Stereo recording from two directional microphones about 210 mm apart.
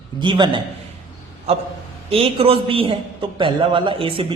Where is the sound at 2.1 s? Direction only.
25° right (ahead or behind).